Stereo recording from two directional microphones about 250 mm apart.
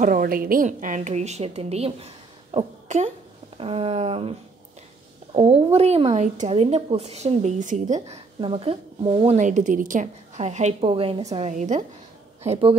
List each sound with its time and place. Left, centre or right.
0.0 s a woman's voice: right